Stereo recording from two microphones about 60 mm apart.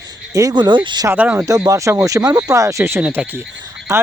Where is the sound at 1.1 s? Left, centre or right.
Right.